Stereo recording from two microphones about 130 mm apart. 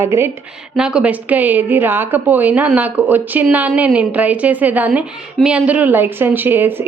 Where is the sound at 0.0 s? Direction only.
20° right (ahead or behind).